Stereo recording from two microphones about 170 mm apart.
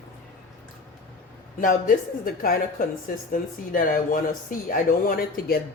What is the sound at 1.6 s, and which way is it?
Speech, 50° left (ahead or behind).